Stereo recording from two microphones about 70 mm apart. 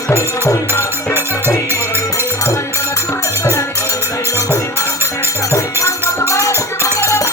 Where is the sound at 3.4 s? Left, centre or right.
Left.